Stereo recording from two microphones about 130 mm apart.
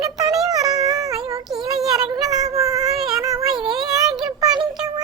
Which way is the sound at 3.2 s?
30° right (ahead or behind).